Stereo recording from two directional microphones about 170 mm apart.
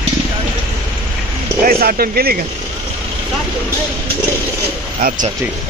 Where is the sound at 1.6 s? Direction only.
60° right (ahead or behind).